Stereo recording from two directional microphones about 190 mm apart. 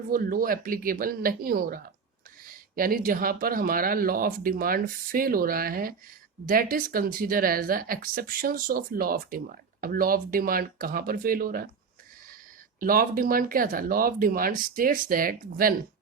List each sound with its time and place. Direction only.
0.1 s speech: 50° right (ahead or behind)
12.8 s speech: 50° right (ahead or behind)